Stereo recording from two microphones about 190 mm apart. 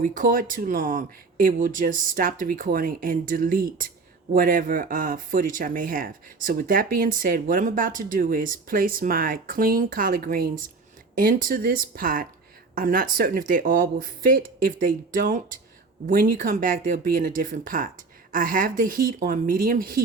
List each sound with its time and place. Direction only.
0.0 s speech: 45° right (ahead or behind)